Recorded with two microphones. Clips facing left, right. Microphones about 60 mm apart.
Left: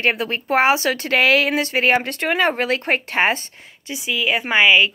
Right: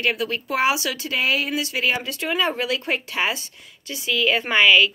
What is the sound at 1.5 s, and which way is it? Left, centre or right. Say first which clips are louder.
Speech: left 6 dB; left.